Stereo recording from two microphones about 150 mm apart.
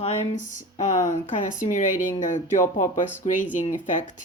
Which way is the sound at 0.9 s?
55° left (ahead or behind).